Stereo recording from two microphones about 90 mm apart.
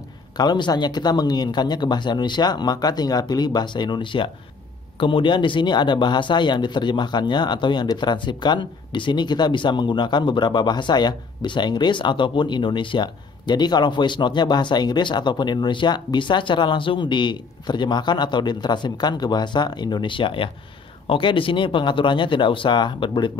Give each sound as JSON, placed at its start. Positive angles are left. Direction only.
{"t": 0.4, "sound": "speech", "side_deg": 50}